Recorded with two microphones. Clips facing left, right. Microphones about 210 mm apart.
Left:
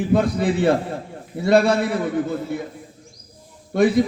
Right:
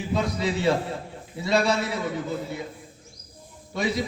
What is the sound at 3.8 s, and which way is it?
Speech, 55° left (ahead or behind).